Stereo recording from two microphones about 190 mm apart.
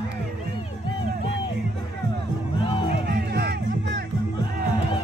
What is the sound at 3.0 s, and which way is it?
Music, 60° right (ahead or behind).